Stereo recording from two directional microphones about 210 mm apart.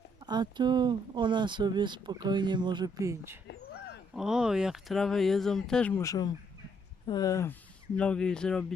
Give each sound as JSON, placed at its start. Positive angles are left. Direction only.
{"t": 0.3, "sound": "speech", "side_deg": -20}
{"t": 4.1, "sound": "speech", "side_deg": -5}